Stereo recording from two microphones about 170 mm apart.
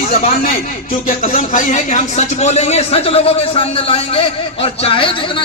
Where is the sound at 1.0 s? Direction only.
50° left (ahead or behind).